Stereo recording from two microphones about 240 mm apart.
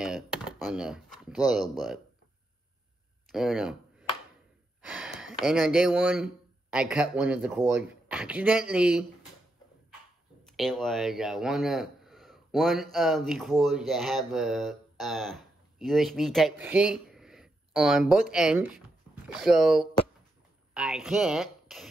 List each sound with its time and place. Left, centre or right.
0.0 s speech: centre
3.3 s speech: centre
4.8 s speech: centre
10.4 s speech: centre